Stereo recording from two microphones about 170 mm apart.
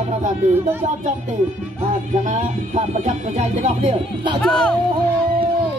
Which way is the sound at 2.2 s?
45° right (ahead or behind).